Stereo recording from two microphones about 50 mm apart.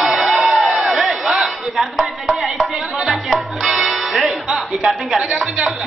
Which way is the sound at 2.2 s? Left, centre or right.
Centre.